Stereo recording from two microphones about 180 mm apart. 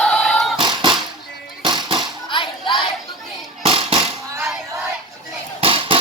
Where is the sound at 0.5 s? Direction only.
25° right (ahead or behind).